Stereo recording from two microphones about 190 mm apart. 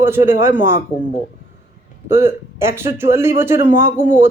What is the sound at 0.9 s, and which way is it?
Speech, 35° left (ahead or behind).